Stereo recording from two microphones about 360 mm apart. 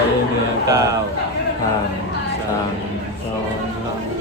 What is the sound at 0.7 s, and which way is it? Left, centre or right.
Speech, centre.